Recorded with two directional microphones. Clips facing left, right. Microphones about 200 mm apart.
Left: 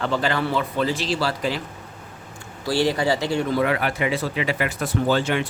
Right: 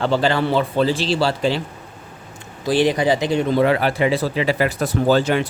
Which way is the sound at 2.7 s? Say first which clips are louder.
Right 4 dB; 20° right (ahead or behind).